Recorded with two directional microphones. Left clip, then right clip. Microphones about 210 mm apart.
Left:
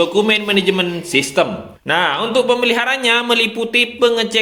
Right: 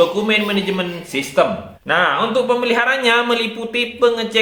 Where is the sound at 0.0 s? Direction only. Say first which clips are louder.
Left 1 dB; 40° left (ahead or behind).